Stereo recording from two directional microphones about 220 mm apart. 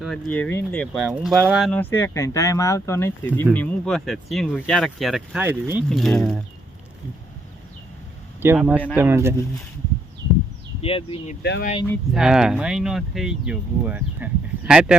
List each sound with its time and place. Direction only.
0.0 s speech: 5° left (ahead or behind)
5.9 s speech: centre (ahead or behind)
8.4 s speech: 10° right (ahead or behind)
10.8 s speech: 25° left (ahead or behind)
12.1 s speech: 5° right (ahead or behind)